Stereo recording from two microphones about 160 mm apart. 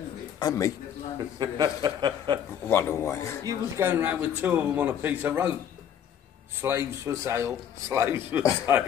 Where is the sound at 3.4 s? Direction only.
15° right (ahead or behind).